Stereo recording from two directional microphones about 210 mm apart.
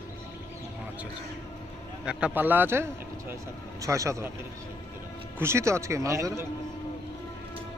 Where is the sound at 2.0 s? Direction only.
5° right (ahead or behind).